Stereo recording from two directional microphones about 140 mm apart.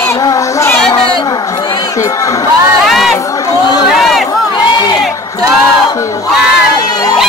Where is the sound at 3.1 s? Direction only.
25° left (ahead or behind).